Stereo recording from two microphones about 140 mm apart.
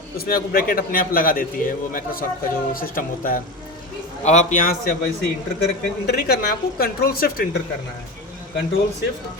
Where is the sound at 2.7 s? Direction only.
90° left.